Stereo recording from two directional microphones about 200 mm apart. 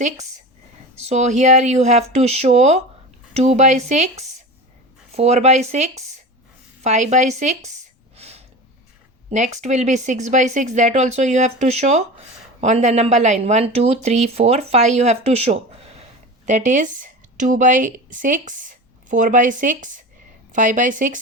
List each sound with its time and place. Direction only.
0.9 s speech: 35° right (ahead or behind)
5.1 s speech: 30° right (ahead or behind)
8.1 s a sound: 30° right (ahead or behind)
9.3 s speech: 35° right (ahead or behind)